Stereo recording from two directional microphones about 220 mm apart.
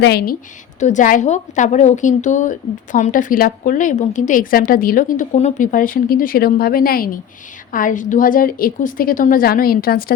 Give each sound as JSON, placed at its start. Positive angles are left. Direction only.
{"t": 0.0, "sound": "speech", "side_deg": 45}
{"t": 0.8, "sound": "a woman's voice", "side_deg": 35}